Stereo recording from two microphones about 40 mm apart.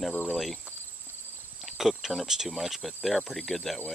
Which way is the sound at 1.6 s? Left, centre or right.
Centre.